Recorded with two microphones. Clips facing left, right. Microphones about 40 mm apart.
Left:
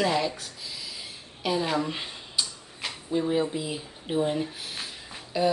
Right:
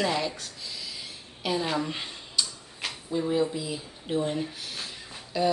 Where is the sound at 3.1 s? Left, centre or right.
Left.